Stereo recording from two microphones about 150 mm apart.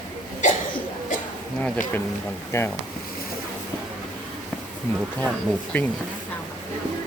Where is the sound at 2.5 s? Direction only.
20° left (ahead or behind).